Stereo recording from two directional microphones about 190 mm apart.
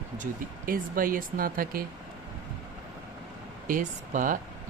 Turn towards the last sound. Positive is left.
turn(degrees=-45)  # may be behind; listen again after turning